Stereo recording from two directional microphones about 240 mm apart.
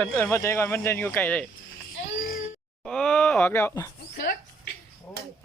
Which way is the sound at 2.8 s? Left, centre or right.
Centre.